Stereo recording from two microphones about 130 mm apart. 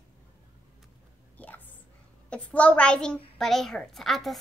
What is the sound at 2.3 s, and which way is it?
A child's voice, 10° left (ahead or behind).